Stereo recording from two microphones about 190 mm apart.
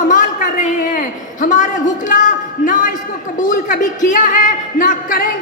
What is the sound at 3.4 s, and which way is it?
A man's voice, 45° left (ahead or behind).